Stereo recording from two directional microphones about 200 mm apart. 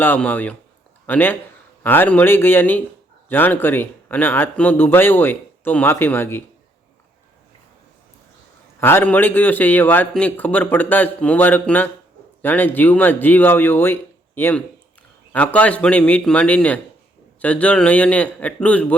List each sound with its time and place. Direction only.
0.0 s speech: 10° left (ahead or behind)
8.8 s speech: 10° left (ahead or behind)